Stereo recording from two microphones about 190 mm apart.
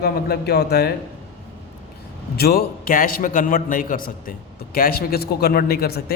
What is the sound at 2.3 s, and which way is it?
A man's voice, 55° left (ahead or behind).